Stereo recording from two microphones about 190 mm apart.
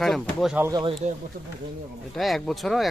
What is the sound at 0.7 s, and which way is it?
Speech, 20° right (ahead or behind).